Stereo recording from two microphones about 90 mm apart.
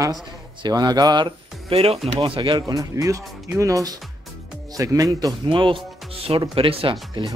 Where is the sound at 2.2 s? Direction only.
75° right (ahead or behind).